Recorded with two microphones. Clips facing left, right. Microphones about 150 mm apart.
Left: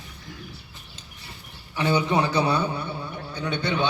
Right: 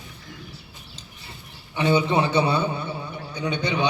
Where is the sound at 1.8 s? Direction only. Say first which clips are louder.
Right 2 dB; 20° right (ahead or behind).